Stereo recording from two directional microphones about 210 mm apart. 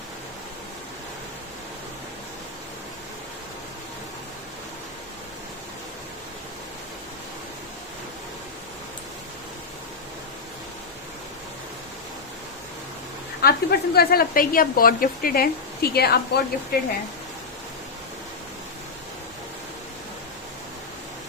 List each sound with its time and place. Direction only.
13.4 s speech: 50° left (ahead or behind)